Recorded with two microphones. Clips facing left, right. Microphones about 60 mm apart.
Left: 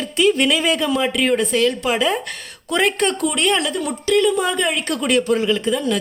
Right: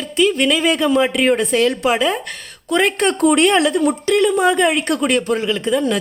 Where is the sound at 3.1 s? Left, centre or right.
Right.